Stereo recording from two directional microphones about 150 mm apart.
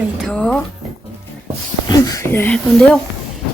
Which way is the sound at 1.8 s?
25° left (ahead or behind).